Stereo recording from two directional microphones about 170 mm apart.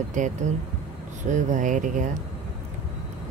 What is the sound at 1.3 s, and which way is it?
Speech, 45° right (ahead or behind).